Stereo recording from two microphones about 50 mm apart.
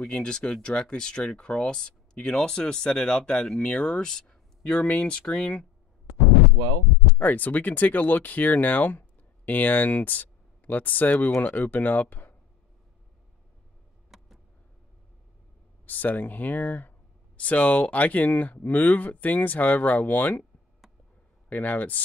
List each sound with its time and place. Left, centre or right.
0.0 s speech: centre
7.2 s speech: left
14.1 s vehicle: centre
15.8 s speech: left
21.5 s speech: left